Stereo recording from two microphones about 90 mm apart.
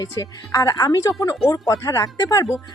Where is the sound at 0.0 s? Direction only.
40° left (ahead or behind).